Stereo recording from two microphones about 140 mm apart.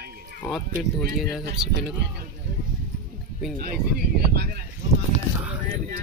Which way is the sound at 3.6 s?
90° right.